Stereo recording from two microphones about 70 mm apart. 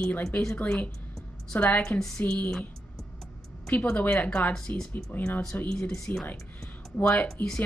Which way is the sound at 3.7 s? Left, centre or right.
Left.